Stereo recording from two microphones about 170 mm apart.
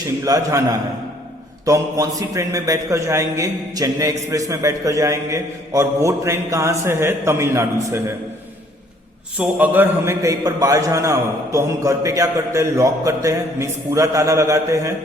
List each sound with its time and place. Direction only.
0.3 s a man's voice: 20° right (ahead or behind)
9.4 s a man's voice: 10° right (ahead or behind)